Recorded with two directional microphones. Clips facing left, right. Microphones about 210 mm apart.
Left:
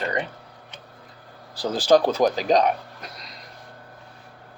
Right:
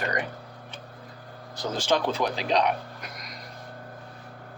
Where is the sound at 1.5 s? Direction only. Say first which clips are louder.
Left 8 dB; 35° left (ahead or behind).